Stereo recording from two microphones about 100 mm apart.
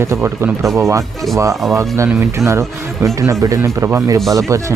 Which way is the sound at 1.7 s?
30° right (ahead or behind).